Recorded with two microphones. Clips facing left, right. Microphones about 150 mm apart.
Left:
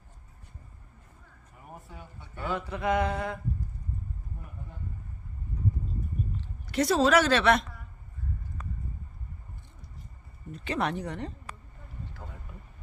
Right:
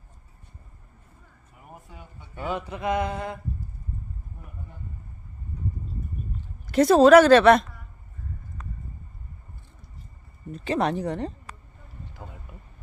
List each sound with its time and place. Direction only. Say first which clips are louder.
1.6 s speech: even; 5° right (ahead or behind)
6.7 s speech: right 9 dB; 50° right (ahead or behind)
10.5 s speech: right 5 dB; 35° right (ahead or behind)
12.1 s vehicle: right 2 dB; 15° right (ahead or behind)